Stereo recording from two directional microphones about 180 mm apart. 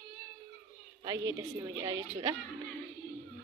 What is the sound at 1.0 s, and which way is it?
Speech, 20° right (ahead or behind).